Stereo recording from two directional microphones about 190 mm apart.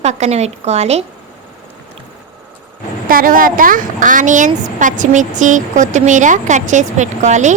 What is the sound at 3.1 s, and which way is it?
A woman's voice, 50° right (ahead or behind).